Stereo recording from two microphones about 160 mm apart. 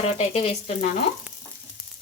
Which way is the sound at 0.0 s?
40° left (ahead or behind).